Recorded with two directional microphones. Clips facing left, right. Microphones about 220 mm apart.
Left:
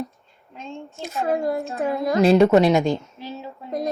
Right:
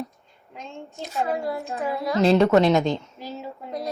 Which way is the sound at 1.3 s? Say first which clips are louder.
Left 7 dB; 50° left (ahead or behind).